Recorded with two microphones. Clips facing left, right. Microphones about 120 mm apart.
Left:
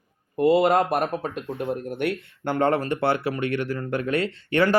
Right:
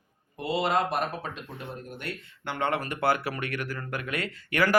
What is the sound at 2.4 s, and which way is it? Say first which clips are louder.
Speech: left 7 dB; 40° left (ahead or behind).